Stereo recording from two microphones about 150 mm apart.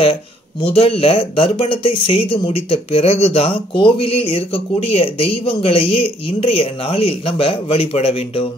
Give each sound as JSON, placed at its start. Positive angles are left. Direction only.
{"t": 0.0, "sound": "speech", "side_deg": 40}